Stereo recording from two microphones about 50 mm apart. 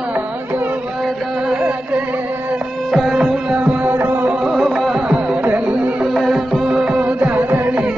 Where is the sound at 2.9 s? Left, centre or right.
Centre.